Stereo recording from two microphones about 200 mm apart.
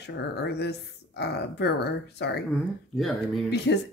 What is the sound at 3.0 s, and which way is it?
Speech, centre (ahead or behind).